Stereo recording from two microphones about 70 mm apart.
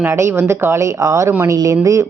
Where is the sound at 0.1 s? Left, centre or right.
Right.